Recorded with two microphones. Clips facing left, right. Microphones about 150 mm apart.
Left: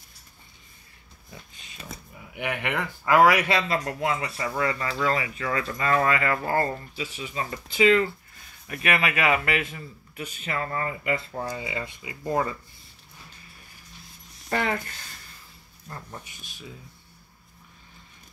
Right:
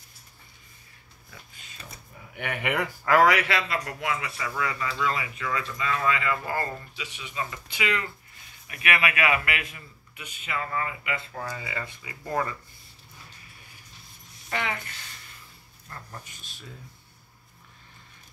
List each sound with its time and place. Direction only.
2.3 s speech: 5° left (ahead or behind)
3.3 s speech: 20° left (ahead or behind)
4.4 s speech: 40° left (ahead or behind)
5.5 s speech: 50° left (ahead or behind)
6.4 s speech: 35° left (ahead or behind)
9.2 s speech: 30° left (ahead or behind)
10.1 s speech: 40° left (ahead or behind)
11.4 s speech: 20° left (ahead or behind)
14.5 s speech: 40° left (ahead or behind)